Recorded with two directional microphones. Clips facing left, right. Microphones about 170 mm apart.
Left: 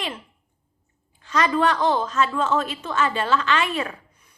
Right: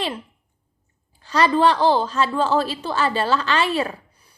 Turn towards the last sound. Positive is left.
turn(degrees=-35)  # may be behind; listen again after turning